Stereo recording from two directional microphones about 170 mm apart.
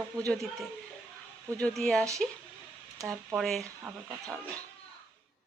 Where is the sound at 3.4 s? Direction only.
Centre (ahead or behind).